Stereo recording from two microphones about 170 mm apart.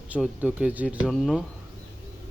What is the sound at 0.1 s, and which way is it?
Speech, 5° right (ahead or behind).